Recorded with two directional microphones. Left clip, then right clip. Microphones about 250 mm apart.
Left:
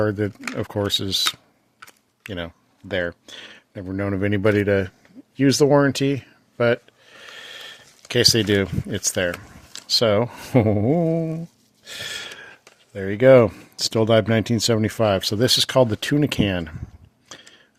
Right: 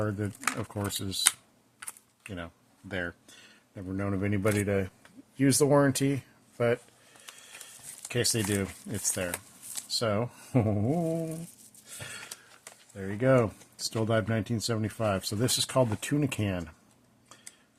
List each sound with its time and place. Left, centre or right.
0.0 s speech: left
8.0 s speech: left
12.9 s speech: left